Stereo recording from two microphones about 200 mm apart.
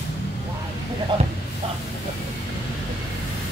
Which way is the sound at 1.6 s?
30° right (ahead or behind).